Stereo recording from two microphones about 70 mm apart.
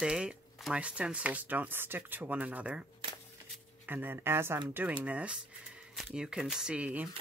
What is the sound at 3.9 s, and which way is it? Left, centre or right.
Speech, right.